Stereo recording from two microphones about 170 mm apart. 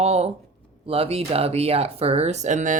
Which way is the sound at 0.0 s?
40° right (ahead or behind).